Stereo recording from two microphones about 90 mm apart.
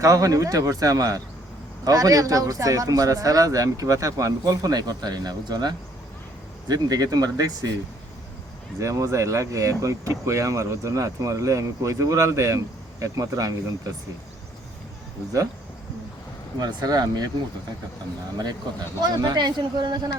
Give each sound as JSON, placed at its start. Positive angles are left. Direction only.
{"t": 0.0, "sound": "speech", "side_deg": -40}
{"t": 8.8, "sound": "speech", "side_deg": -35}
{"t": 16.6, "sound": "speech", "side_deg": -45}
{"t": 19.0, "sound": "speech", "side_deg": -50}